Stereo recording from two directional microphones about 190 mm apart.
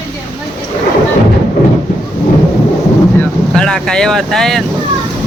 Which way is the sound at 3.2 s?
5° left (ahead or behind).